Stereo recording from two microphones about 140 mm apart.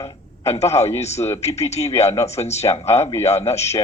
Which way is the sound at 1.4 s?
50° left (ahead or behind).